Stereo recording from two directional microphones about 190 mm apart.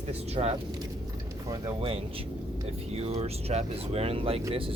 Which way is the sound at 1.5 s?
20° right (ahead or behind).